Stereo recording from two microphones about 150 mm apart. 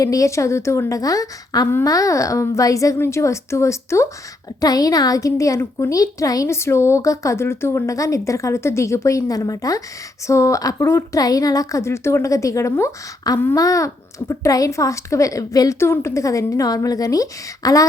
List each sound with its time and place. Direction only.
0.0 s a woman's voice: 20° left (ahead or behind)